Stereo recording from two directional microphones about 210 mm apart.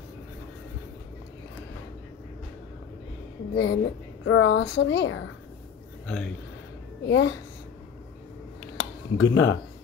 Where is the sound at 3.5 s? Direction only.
65° left (ahead or behind).